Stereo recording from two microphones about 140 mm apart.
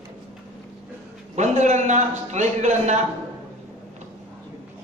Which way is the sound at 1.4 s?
55° right (ahead or behind).